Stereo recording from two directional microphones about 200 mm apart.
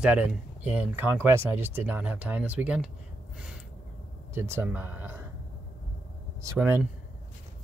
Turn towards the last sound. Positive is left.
turn(degrees=-10)  # may be behind; listen again after turning